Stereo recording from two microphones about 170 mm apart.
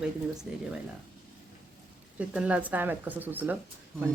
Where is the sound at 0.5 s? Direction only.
5° right (ahead or behind).